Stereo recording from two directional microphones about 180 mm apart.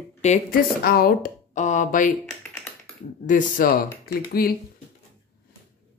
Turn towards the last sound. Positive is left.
turn(degrees=55)  # may be behind; listen again after turning